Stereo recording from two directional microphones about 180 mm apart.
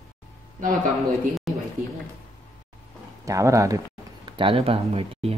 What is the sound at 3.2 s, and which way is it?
Speech, 15° right (ahead or behind).